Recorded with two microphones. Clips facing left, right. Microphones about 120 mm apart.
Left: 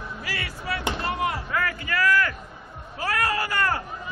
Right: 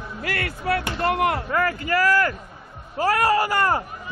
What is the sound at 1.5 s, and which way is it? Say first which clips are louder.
A man's voice: right 5 dB; 35° right (ahead or behind).